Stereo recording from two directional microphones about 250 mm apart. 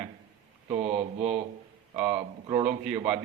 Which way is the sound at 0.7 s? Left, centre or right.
Right.